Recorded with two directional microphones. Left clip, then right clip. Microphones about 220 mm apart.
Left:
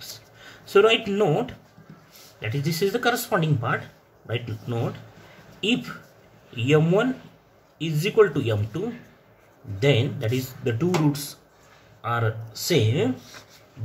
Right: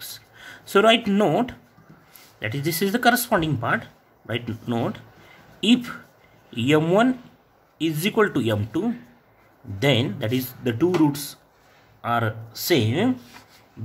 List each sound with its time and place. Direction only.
0.4 s speech: 40° right (ahead or behind)